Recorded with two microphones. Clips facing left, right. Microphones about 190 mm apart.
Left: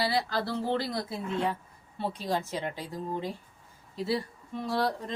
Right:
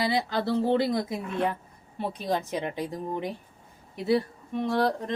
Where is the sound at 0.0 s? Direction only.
20° right (ahead or behind).